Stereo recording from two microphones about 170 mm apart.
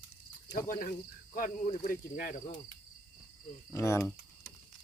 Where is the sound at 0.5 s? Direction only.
55° left (ahead or behind).